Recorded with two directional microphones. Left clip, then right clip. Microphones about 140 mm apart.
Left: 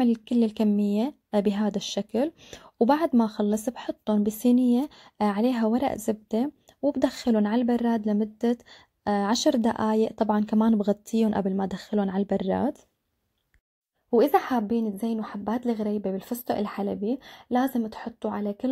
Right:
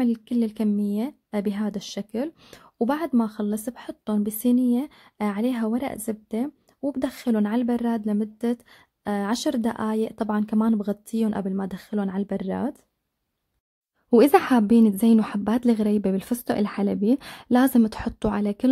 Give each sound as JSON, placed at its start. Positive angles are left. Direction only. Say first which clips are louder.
{"t": 0.0, "sound": "speech", "louder": "left 1 dB", "side_deg": 0}
{"t": 14.1, "sound": "a woman's voice", "louder": "right 4 dB", "side_deg": -35}